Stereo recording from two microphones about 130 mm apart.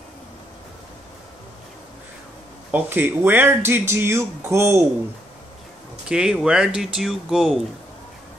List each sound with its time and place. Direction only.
2.7 s speech: 15° right (ahead or behind)
6.0 s speech: 5° right (ahead or behind)